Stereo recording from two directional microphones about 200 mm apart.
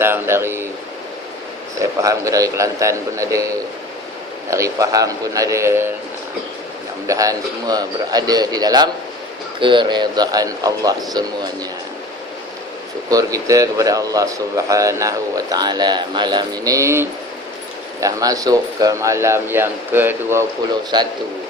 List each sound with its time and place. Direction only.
0.0 s speech: 10° right (ahead or behind)
1.8 s speech: 15° right (ahead or behind)
4.5 s speech: 15° right (ahead or behind)
7.1 s a man's voice: 15° right (ahead or behind)
13.1 s speech: 15° right (ahead or behind)
20.9 s a man's voice: 20° right (ahead or behind)